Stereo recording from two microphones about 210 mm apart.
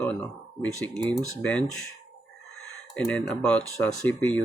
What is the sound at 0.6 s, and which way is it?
Speech, 5° left (ahead or behind).